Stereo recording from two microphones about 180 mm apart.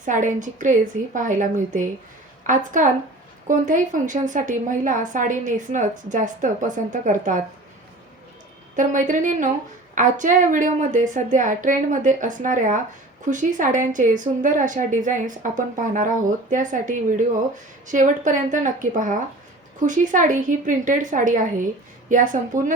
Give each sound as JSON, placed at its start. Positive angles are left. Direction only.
{"t": 0.0, "sound": "a woman's voice", "side_deg": -45}
{"t": 8.7, "sound": "a woman's voice", "side_deg": -45}